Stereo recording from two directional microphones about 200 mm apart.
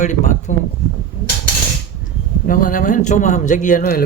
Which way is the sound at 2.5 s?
40° left (ahead or behind).